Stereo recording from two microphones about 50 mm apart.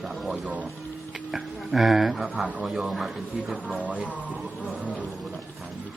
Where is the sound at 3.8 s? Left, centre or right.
Right.